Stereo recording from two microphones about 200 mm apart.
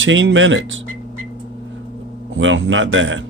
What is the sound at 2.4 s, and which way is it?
Speech, 70° right (ahead or behind).